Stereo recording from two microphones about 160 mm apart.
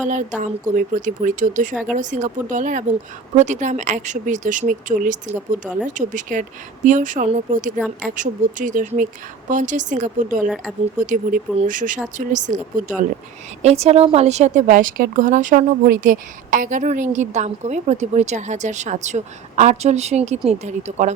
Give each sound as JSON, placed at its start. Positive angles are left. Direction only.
{"t": 0.0, "sound": "a woman's voice", "side_deg": -50}
{"t": 5.3, "sound": "speech", "side_deg": -10}
{"t": 5.9, "sound": "a woman's voice", "side_deg": -55}
{"t": 13.6, "sound": "a woman's voice", "side_deg": -40}